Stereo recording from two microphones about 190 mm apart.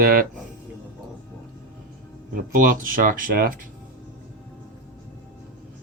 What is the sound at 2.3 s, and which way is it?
Speech, 45° right (ahead or behind).